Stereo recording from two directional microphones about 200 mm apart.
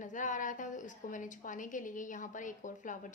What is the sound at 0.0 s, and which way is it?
A woman's voice, 40° left (ahead or behind).